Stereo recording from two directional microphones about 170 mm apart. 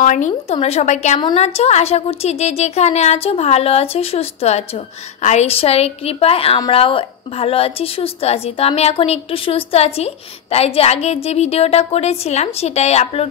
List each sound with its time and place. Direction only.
0.0 s a woman's voice: 45° left (ahead or behind)